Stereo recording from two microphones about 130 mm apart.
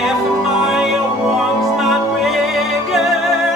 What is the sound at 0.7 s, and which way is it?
Music, centre (ahead or behind).